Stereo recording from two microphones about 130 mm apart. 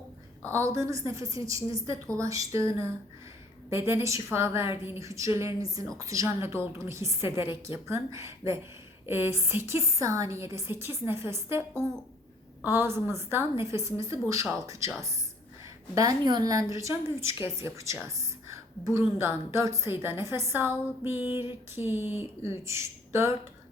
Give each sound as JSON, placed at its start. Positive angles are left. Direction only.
{"t": 0.5, "sound": "a woman's voice", "side_deg": -20}
{"t": 3.7, "sound": "a woman's voice", "side_deg": -20}